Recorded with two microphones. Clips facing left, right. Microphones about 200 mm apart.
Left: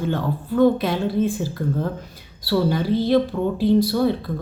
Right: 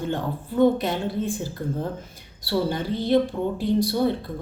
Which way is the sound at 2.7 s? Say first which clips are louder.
Left 2 dB; 20° right (ahead or behind).